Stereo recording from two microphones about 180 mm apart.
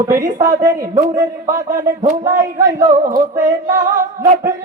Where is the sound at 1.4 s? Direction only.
50° right (ahead or behind).